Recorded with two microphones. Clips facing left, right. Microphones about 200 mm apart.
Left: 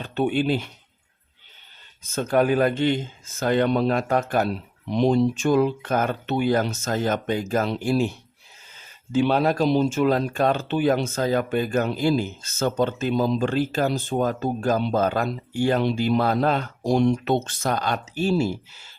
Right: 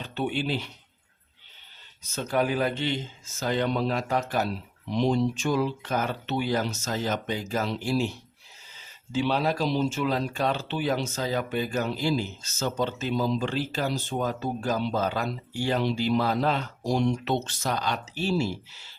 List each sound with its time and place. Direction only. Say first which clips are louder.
0.0 s speech: left 6 dB; 50° left (ahead or behind)
2.0 s speech: left 6 dB; 50° left (ahead or behind)